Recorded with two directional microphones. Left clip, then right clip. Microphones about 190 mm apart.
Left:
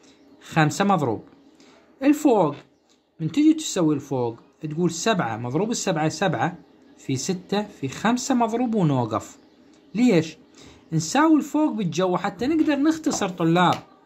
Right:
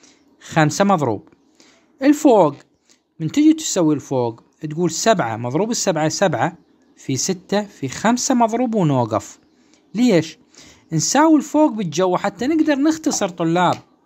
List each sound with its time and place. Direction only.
0.4 s speech: 45° right (ahead or behind)